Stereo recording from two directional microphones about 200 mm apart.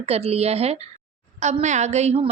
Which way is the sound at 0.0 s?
30° right (ahead or behind).